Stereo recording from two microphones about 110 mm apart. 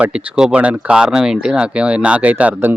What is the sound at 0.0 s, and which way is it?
Speech, 10° right (ahead or behind).